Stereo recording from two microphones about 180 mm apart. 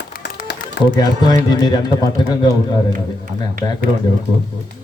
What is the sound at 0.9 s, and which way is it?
A man's voice, 20° left (ahead or behind).